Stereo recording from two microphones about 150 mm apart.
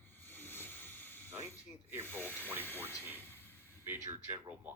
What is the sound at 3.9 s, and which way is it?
Speech, 15° right (ahead or behind).